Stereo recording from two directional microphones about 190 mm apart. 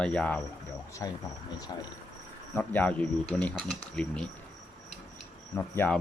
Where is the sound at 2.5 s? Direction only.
10° left (ahead or behind).